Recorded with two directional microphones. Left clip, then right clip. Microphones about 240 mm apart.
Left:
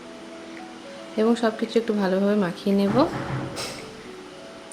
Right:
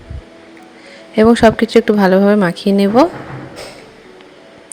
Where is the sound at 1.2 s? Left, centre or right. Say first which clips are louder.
Right 13 dB; right.